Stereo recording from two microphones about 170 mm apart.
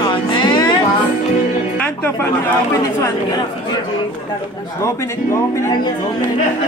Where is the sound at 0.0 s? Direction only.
25° left (ahead or behind).